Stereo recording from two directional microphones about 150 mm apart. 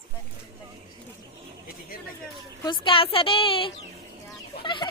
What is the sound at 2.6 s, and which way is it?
A woman's voice, 30° left (ahead or behind).